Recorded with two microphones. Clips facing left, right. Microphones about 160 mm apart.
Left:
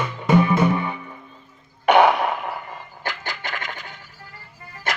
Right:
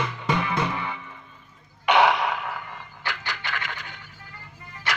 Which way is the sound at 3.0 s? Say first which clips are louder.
Left 2 dB; 45° left (ahead or behind).